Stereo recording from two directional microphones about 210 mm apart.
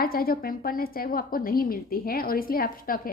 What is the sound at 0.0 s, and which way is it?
A woman's voice, 45° left (ahead or behind).